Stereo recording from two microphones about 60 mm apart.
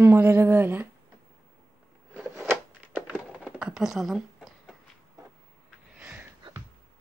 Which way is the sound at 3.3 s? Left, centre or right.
Centre.